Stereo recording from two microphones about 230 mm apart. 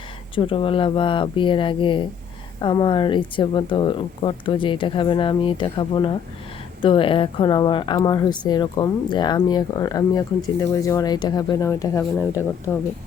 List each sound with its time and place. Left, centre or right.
0.3 s speech: left